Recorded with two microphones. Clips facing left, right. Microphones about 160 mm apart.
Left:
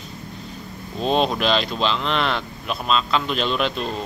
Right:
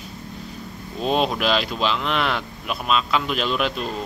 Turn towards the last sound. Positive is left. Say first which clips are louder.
# left 1 dB
turn(degrees=-5)  # may be behind; listen again after turning